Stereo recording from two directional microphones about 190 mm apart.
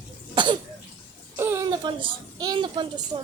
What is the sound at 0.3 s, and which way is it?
Cough, 25° right (ahead or behind).